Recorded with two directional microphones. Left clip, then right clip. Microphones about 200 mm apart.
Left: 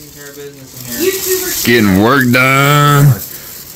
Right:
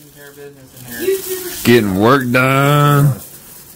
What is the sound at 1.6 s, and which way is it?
Speech, 5° left (ahead or behind).